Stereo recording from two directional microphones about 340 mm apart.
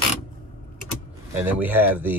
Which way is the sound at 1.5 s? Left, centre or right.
Centre.